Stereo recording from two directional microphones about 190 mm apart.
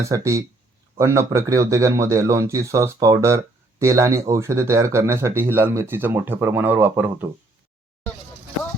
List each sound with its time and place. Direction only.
0.0 s speech: 15° right (ahead or behind)